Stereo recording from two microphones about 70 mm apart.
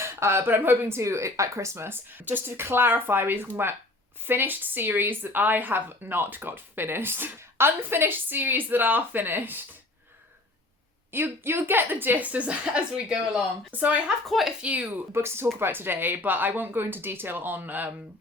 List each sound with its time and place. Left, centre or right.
0.0 s speech: right
1.0 s speech: right
11.1 s speech: right
14.3 s speech: centre
14.6 s speech: right
15.1 s speech: right